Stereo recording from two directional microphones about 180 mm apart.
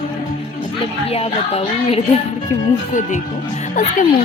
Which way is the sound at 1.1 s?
35° left (ahead or behind).